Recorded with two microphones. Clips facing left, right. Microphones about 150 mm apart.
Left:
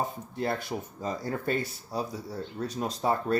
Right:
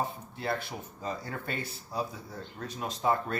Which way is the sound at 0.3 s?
45° left (ahead or behind).